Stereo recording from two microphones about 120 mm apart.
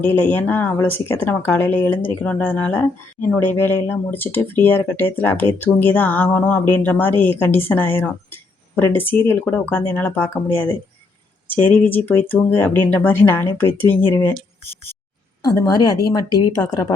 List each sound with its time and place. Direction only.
0.0 s speech: 15° left (ahead or behind)
15.4 s a woman's voice: 30° left (ahead or behind)